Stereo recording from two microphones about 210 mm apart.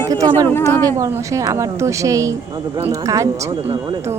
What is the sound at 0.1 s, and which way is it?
Speech, 15° right (ahead or behind).